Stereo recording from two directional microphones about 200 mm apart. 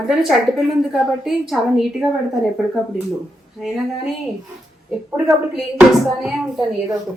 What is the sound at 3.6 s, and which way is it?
A woman's voice, centre (ahead or behind).